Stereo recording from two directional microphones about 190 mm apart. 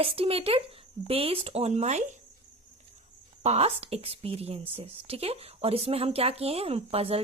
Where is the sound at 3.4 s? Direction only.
35° right (ahead or behind).